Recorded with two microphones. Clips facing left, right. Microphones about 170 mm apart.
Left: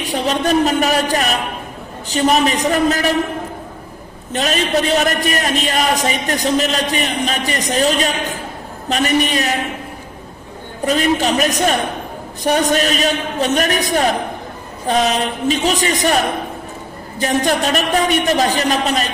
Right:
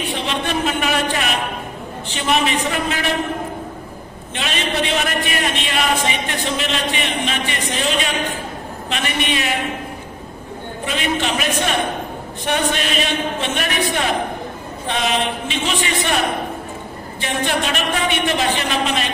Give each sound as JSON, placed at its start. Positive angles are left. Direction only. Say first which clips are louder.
{"t": 0.0, "sound": "a man's voice", "louder": "left 5 dB", "side_deg": 40}
{"t": 4.3, "sound": "a man's voice", "louder": "left 6 dB", "side_deg": 40}
{"t": 10.9, "sound": "a man's voice", "louder": "left 6 dB", "side_deg": 40}
{"t": 17.2, "sound": "a man's voice", "louder": "left 5 dB", "side_deg": 40}